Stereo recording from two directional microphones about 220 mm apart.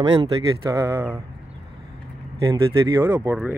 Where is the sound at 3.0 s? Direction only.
10° right (ahead or behind).